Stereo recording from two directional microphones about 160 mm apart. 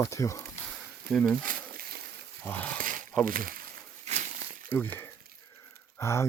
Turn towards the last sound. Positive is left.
turn(degrees=15)  # may be behind; listen again after turning